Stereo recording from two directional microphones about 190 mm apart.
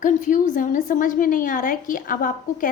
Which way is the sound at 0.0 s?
40° left (ahead or behind).